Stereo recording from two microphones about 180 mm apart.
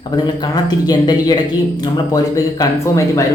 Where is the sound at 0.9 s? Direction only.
20° left (ahead or behind).